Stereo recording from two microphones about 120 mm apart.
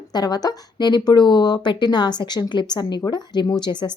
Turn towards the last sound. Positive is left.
turn(degrees=40)  # may be behind; listen again after turning